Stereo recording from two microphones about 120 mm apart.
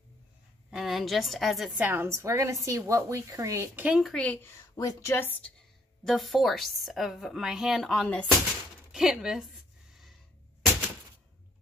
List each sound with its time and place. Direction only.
0.7 s a woman's voice: 5° right (ahead or behind)
1.8 s a woman's voice: 15° right (ahead or behind)
3.9 s a woman's voice: centre (ahead or behind)
4.2 s speech: 10° left (ahead or behind)
4.6 s speech: 25° left (ahead or behind)
6.0 s a woman's voice: centre (ahead or behind)
8.9 s a sound: 5° right (ahead or behind)